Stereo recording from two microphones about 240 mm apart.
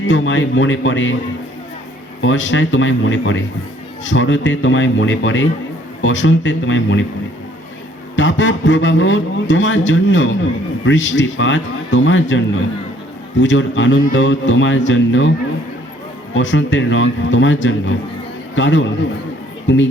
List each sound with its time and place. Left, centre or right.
0.1 s a man's voice: left
2.2 s a man's voice: left
8.1 s a man's voice: left
13.4 s a man's voice: left
16.3 s a man's voice: left